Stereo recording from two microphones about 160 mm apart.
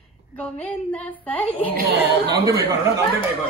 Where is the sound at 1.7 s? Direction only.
75° right (ahead or behind).